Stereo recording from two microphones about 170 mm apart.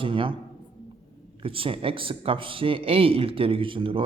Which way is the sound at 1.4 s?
30° right (ahead or behind).